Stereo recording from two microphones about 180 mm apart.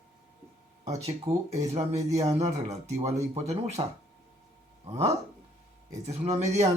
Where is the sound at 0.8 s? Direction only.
40° right (ahead or behind).